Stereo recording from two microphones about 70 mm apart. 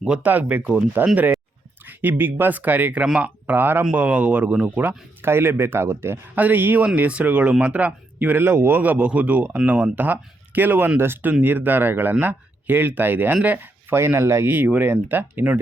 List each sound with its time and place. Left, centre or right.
0.2 s speech: right
3.5 s speech: right
5.2 s speech: right
8.4 s speech: right